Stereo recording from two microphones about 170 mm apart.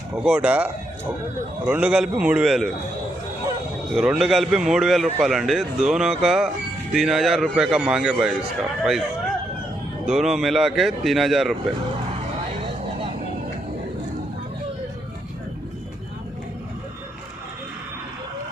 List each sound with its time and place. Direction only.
0.1 s a man's voice: 5° right (ahead or behind)
3.9 s speech: 5° right (ahead or behind)
10.1 s speech: centre (ahead or behind)